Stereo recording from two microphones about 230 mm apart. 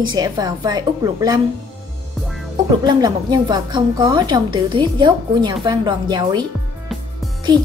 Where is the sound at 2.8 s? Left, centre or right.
Centre.